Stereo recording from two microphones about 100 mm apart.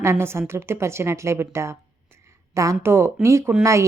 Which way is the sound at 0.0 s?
25° right (ahead or behind).